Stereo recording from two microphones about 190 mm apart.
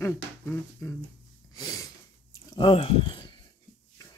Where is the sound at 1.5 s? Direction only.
20° left (ahead or behind).